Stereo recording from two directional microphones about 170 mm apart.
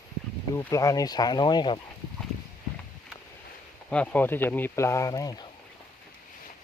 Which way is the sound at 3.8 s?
5° left (ahead or behind).